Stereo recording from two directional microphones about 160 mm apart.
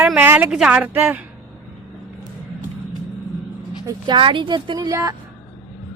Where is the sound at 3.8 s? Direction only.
25° right (ahead or behind).